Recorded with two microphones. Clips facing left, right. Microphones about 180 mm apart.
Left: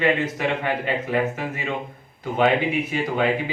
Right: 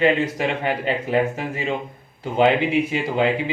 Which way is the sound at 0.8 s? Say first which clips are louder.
Right 5 dB; 25° right (ahead or behind).